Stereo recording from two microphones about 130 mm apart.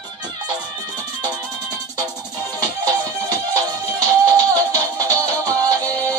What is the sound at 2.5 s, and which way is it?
Music, 30° right (ahead or behind).